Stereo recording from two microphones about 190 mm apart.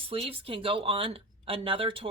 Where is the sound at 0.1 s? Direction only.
30° right (ahead or behind).